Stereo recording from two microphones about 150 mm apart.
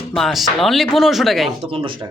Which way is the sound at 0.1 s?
Centre (ahead or behind).